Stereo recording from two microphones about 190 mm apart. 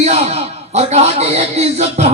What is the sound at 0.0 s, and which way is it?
A man's voice, 35° right (ahead or behind).